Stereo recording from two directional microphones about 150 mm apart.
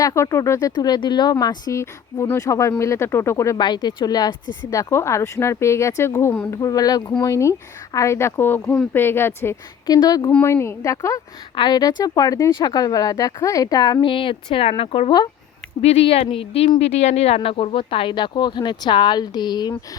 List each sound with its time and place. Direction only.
0.0 s a woman's voice: 20° left (ahead or behind)
6.6 s a woman's voice: 25° left (ahead or behind)